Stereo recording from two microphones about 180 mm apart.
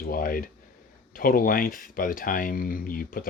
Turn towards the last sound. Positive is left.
turn(degrees=55)  # may be behind; listen again after turning